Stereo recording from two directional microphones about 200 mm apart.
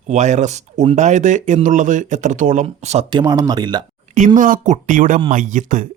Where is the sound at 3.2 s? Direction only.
20° right (ahead or behind).